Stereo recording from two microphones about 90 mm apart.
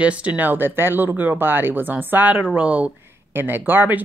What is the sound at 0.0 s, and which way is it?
Speech, 15° right (ahead or behind).